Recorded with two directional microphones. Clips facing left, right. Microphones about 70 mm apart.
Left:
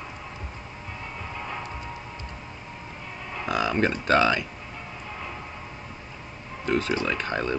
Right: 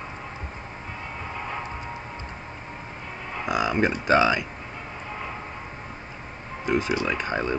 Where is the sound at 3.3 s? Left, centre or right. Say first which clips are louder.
Right 1 dB; centre.